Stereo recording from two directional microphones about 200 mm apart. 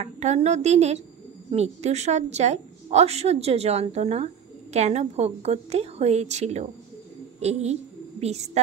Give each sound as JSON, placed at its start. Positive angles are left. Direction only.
{"t": 0.0, "sound": "a woman's voice", "side_deg": -35}